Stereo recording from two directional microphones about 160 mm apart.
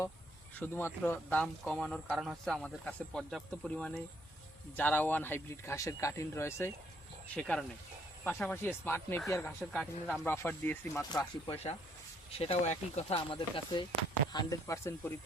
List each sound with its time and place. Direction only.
0.6 s speech: 15° left (ahead or behind)
7.3 s speech: 5° left (ahead or behind)
9.7 s speech: 5° left (ahead or behind)
10.2 s speech: 15° left (ahead or behind)
11.1 s speech: 25° left (ahead or behind)
11.5 s speech: 40° left (ahead or behind)
14.3 s speech: 20° left (ahead or behind)